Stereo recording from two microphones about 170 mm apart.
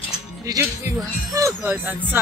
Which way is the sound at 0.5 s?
20° right (ahead or behind).